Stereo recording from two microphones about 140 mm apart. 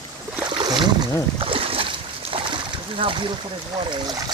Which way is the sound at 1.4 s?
40° right (ahead or behind).